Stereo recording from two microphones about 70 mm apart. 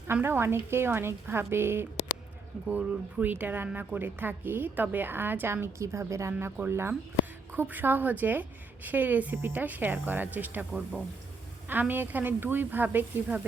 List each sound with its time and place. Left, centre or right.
0.1 s a woman's voice: right
2.7 s a woman's voice: right
10.7 s speech: centre
11.7 s a woman's voice: right